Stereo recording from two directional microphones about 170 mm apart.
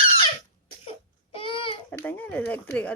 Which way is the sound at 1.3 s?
30° left (ahead or behind).